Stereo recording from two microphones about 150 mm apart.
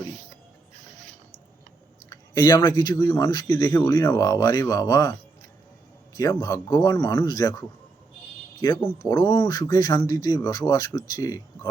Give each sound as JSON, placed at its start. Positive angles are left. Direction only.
{"t": 2.0, "sound": "speech", "side_deg": 25}
{"t": 6.1, "sound": "speech", "side_deg": 25}
{"t": 8.6, "sound": "speech", "side_deg": 30}